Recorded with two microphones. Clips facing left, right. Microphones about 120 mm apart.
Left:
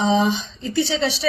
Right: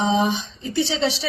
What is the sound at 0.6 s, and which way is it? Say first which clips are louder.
Speech: even; 25° right (ahead or behind).